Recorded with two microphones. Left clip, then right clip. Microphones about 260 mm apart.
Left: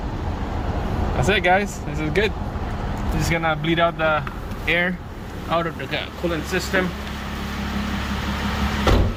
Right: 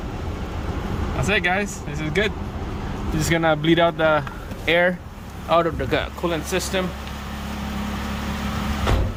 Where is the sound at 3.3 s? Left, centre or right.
Centre.